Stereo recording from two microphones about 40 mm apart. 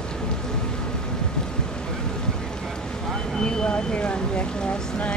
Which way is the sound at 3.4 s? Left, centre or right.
Left.